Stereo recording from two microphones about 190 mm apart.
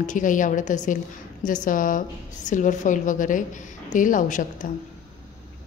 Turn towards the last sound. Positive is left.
turn(degrees=40)  # may be behind; listen again after turning